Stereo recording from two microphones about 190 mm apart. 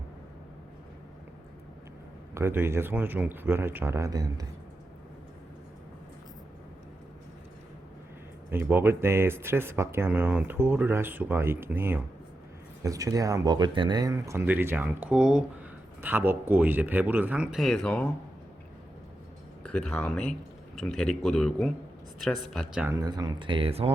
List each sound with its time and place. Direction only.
2.3 s speech: 10° right (ahead or behind)
8.4 s speech: 10° right (ahead or behind); by 18.1 s 5° left (ahead or behind)
19.6 s speech: 5° left (ahead or behind)
23.0 s speech: 20° right (ahead or behind)